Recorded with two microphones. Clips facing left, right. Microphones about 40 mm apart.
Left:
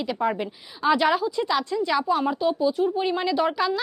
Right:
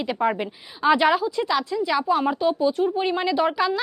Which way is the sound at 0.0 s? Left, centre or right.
Right.